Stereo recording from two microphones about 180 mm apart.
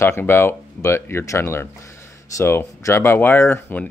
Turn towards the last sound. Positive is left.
turn(degrees=10)  # may be behind; listen again after turning